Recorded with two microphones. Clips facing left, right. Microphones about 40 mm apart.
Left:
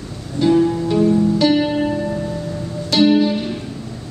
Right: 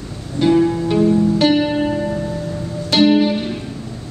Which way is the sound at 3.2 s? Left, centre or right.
Right.